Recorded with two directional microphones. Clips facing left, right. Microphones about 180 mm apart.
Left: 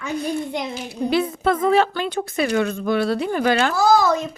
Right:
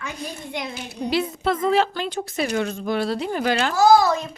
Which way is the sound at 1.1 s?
50° left (ahead or behind).